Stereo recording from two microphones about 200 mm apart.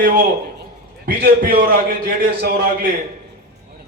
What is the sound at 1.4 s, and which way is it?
A man's voice, 50° right (ahead or behind).